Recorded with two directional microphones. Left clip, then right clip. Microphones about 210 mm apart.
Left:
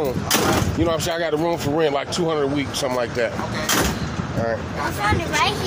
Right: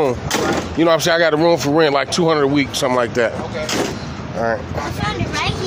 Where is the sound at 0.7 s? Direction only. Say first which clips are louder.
Right 8 dB; 50° right (ahead or behind).